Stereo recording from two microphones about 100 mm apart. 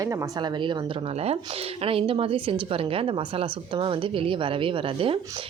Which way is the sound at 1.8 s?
65° right (ahead or behind).